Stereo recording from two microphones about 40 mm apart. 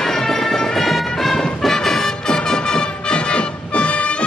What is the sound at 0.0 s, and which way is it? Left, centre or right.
Music, centre.